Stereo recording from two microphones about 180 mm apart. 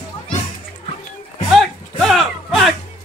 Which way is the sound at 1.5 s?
Centre (ahead or behind).